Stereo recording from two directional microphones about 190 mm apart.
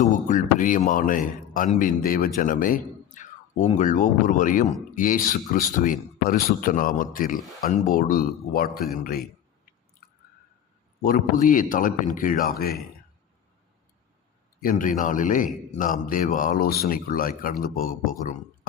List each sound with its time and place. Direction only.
0.0 s a man's voice: 45° left (ahead or behind)
11.0 s a man's voice: 45° left (ahead or behind)
14.6 s a man's voice: 45° left (ahead or behind)